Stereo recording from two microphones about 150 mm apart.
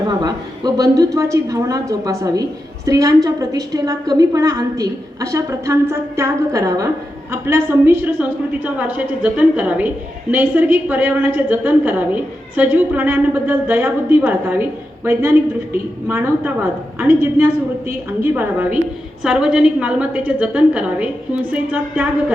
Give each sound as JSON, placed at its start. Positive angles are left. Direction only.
{"t": 0.1, "sound": "a woman's voice", "side_deg": -25}
{"t": 16.0, "sound": "a woman's voice", "side_deg": -15}